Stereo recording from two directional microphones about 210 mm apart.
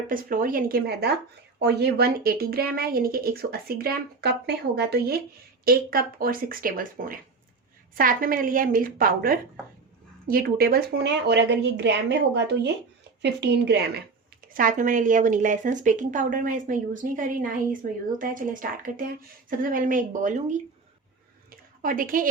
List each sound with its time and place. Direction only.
0.1 s speech: 40° right (ahead or behind)
14.5 s a woman's voice: 40° right (ahead or behind)
21.5 s a sound: 40° right (ahead or behind)